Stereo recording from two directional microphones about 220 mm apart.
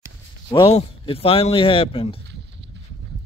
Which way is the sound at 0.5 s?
25° left (ahead or behind).